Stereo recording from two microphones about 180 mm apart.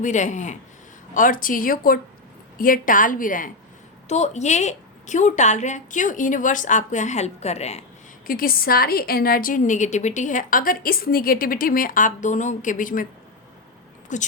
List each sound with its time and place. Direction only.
0.0 s a woman's voice: 40° left (ahead or behind)
8.3 s a woman's voice: 55° left (ahead or behind)
14.1 s a woman's voice: 45° left (ahead or behind)